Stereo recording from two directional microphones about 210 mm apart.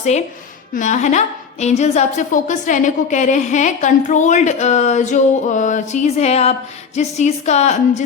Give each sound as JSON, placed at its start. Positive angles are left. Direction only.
{"t": 0.7, "sound": "a woman's voice", "side_deg": 35}